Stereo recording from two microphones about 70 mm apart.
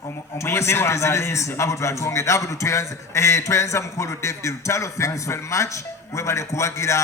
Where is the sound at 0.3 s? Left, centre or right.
Left.